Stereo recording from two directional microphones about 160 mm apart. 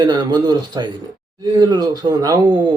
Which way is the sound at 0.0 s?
25° right (ahead or behind).